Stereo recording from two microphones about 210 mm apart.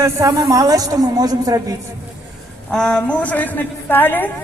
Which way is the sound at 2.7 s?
5° left (ahead or behind).